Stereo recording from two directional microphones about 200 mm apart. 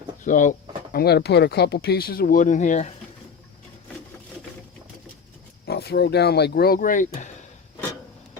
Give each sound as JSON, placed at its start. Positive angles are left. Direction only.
{"t": 0.3, "sound": "speech", "side_deg": 40}
{"t": 0.9, "sound": "speech", "side_deg": 55}
{"t": 5.6, "sound": "speech", "side_deg": 55}